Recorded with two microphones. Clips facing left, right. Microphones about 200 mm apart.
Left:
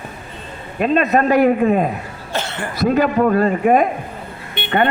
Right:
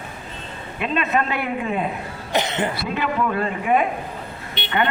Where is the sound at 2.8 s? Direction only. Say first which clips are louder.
Left 8 dB; 40° left (ahead or behind).